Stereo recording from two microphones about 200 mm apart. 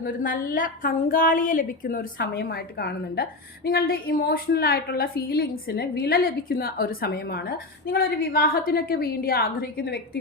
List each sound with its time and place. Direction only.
0.0 s a woman's voice: 45° left (ahead or behind)